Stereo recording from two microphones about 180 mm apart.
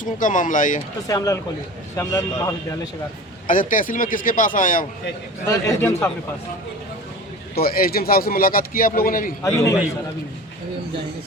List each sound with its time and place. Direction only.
0.0 s a man's voice: 45° left (ahead or behind)
1.0 s a man's voice: 20° left (ahead or behind)
3.4 s a man's voice: 50° left (ahead or behind)
5.5 s a man's voice: 15° left (ahead or behind)
7.5 s speech: 55° left (ahead or behind)
9.4 s a man's voice: 15° left (ahead or behind)